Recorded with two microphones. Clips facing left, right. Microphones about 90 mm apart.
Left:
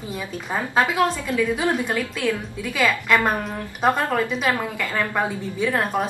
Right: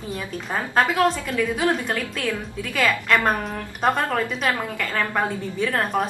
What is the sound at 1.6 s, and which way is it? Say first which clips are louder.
Speech: right 4 dB; 20° left (ahead or behind).